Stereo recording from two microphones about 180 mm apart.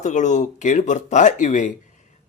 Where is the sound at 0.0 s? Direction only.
40° left (ahead or behind).